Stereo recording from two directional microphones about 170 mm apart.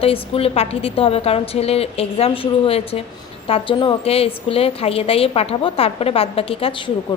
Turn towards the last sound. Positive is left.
turn(degrees=30)  # may be behind; listen again after turning